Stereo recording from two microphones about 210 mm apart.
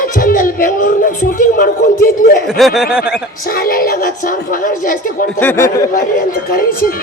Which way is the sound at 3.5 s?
45° left (ahead or behind).